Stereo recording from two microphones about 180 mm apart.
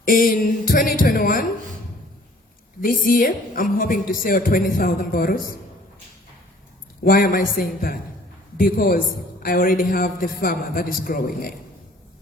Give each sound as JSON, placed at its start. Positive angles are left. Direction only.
{"t": 0.1, "sound": "a man's voice", "side_deg": 50}
{"t": 2.8, "sound": "a man's voice", "side_deg": 50}
{"t": 7.0, "sound": "a man's voice", "side_deg": 50}